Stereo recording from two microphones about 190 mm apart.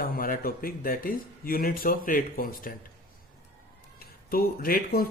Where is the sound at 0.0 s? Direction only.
50° left (ahead or behind).